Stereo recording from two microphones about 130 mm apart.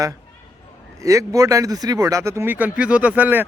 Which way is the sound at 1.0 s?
25° right (ahead or behind).